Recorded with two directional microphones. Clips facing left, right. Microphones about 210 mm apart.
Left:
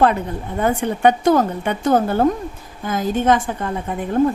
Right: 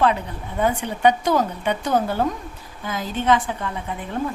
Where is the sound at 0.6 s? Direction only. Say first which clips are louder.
Left 3 dB; 50° left (ahead or behind).